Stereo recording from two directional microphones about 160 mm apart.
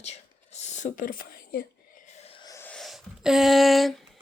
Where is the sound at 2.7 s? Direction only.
Centre (ahead or behind).